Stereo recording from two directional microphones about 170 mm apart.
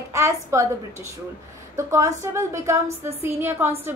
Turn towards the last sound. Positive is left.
turn(degrees=-15)  # may be behind; listen again after turning